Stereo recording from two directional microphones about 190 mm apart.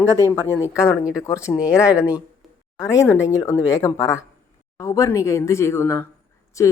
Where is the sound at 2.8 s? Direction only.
15° left (ahead or behind).